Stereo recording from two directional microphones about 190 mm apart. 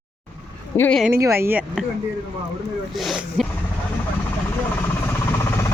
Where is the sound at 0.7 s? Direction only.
10° left (ahead or behind).